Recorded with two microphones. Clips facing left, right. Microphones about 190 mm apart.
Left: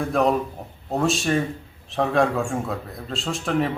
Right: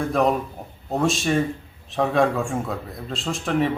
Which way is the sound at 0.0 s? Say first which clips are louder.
Even; centre (ahead or behind).